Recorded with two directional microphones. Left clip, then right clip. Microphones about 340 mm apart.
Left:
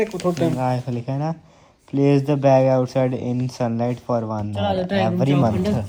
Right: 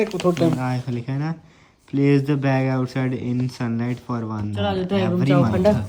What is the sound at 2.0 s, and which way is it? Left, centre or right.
Speech, centre.